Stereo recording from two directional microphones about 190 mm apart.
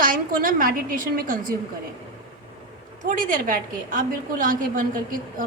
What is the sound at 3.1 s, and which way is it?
A woman's voice, 45° right (ahead or behind).